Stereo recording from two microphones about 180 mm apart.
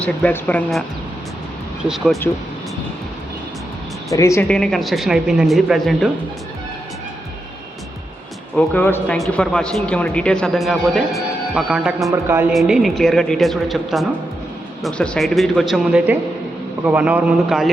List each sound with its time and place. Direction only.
0.0 s speech: 10° left (ahead or behind)
4.1 s speech: 15° left (ahead or behind)
4.4 s speech: 5° left (ahead or behind)
8.5 s speech: 10° left (ahead or behind)
12.1 s a man's voice: 10° right (ahead or behind)